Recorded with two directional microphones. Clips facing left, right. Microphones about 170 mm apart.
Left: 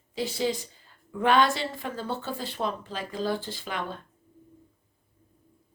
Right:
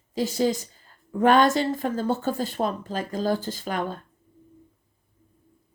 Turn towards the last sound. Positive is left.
turn(degrees=-45)  # may be behind; listen again after turning